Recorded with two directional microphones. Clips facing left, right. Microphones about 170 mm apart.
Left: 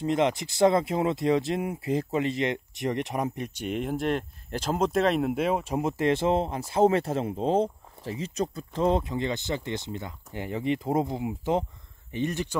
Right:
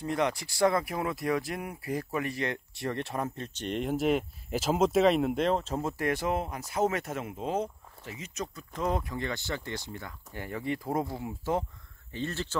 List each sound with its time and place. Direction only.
0.0 s speech: 20° left (ahead or behind)